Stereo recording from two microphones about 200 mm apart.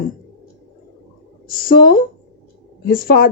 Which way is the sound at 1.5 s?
45° left (ahead or behind).